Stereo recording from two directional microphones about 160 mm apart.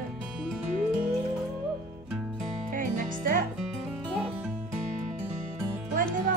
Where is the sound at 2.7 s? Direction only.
55° right (ahead or behind).